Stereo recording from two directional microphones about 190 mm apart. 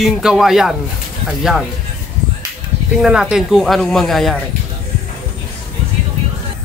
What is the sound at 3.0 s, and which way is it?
Speech, 5° right (ahead or behind).